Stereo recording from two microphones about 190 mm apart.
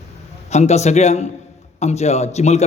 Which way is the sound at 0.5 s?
35° left (ahead or behind).